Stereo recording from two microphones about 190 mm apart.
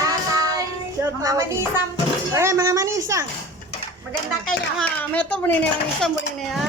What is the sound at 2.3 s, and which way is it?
Speech, 15° right (ahead or behind).